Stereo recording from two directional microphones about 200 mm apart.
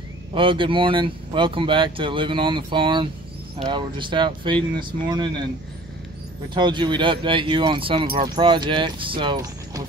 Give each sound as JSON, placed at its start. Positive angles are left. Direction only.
{"t": 0.3, "sound": "speech", "side_deg": -25}
{"t": 6.5, "sound": "speech", "side_deg": -25}